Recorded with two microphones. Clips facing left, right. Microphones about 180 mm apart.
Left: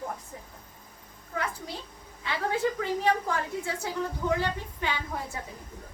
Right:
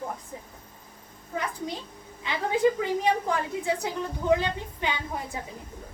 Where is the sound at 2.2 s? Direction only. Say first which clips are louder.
Right 4 dB; 20° right (ahead or behind).